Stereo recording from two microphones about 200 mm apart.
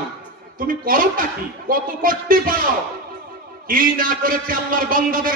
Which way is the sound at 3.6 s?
45° right (ahead or behind).